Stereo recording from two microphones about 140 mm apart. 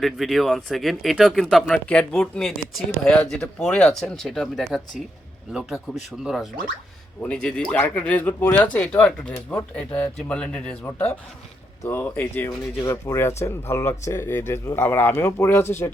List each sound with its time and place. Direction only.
0.0 s speech: centre (ahead or behind)
7.2 s speech: 10° left (ahead or behind)